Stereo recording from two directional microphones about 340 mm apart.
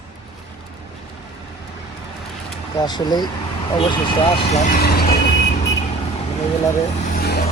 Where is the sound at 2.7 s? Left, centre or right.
Centre.